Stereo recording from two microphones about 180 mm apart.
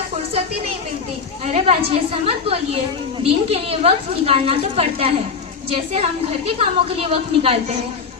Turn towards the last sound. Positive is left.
turn(degrees=-30)  # may be behind; listen again after turning